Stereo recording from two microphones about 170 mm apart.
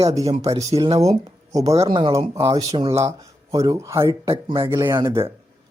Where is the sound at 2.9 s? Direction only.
15° right (ahead or behind).